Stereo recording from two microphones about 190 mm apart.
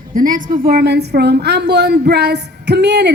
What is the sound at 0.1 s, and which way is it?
A woman's voice, 45° right (ahead or behind).